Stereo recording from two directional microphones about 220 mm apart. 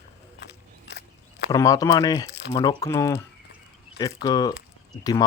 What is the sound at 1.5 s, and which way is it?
Speech, 15° left (ahead or behind).